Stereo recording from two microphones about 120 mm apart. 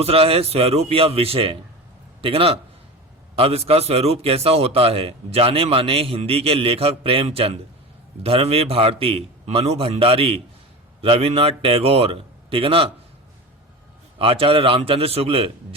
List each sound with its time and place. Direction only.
0.0 s a man's voice: 55° right (ahead or behind)
14.2 s a man's voice: 50° right (ahead or behind)